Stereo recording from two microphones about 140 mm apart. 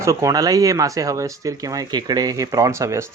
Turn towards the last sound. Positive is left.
turn(degrees=-20)  # may be behind; listen again after turning